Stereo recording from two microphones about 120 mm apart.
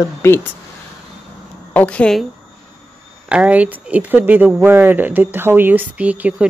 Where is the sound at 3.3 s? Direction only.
10° right (ahead or behind).